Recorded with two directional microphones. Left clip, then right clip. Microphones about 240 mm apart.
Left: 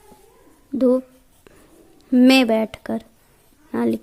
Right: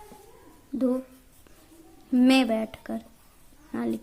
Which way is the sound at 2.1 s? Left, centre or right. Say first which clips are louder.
Left 7 dB; left.